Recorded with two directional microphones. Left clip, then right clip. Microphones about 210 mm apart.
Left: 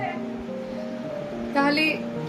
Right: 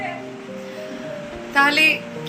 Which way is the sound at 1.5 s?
Centre (ahead or behind).